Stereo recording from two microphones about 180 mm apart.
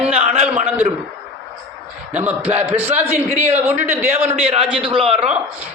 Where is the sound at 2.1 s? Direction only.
10° right (ahead or behind).